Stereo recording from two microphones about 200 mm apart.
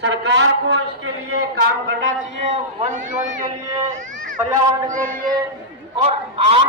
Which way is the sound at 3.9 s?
40° right (ahead or behind).